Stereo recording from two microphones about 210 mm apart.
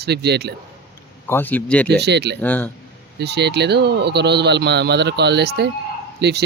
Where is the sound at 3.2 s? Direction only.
50° right (ahead or behind).